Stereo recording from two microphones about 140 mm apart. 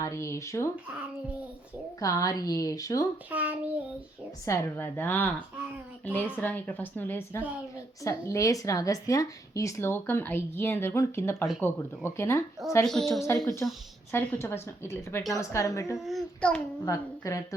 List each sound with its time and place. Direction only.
0.0 s speech: 20° left (ahead or behind)
2.0 s speech: 25° left (ahead or behind)
3.2 s child singing: 10° right (ahead or behind)
4.4 s speech: 15° left (ahead or behind)
12.8 s a child's voice: 5° left (ahead or behind)
13.3 s speech: 15° left (ahead or behind)
16.0 s a child's voice: centre (ahead or behind)
16.8 s speech: 25° left (ahead or behind)